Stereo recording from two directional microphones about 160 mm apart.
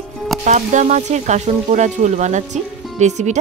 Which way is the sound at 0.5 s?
50° right (ahead or behind).